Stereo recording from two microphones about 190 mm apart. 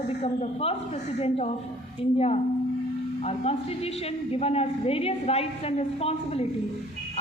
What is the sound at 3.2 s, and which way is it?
A woman's voice, 30° left (ahead or behind).